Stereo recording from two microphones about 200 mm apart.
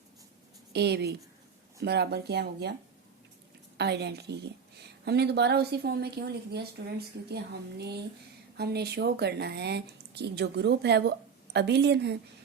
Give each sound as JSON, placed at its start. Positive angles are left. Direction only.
{"t": 0.7, "sound": "a woman's voice", "side_deg": -55}
{"t": 3.8, "sound": "a woman's voice", "side_deg": -55}